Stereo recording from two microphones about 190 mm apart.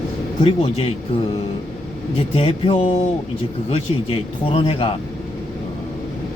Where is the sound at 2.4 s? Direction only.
30° left (ahead or behind).